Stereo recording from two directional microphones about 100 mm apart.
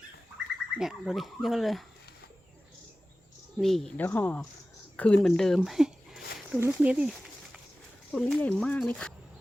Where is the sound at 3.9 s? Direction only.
20° left (ahead or behind).